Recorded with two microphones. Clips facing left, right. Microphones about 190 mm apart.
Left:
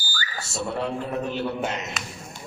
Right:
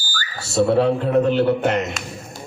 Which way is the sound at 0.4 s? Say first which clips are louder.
Right 13 dB; 75° right (ahead or behind).